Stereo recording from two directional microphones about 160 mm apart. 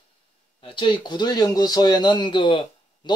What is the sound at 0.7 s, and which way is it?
Speech, 30° left (ahead or behind).